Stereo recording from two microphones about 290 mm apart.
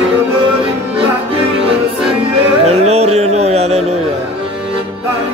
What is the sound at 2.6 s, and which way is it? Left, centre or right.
Music, right.